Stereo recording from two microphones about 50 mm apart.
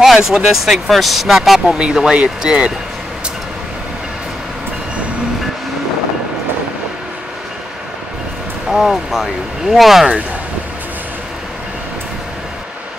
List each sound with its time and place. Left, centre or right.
0.0 s speech: centre
1.8 s speech: centre
8.6 s speech: centre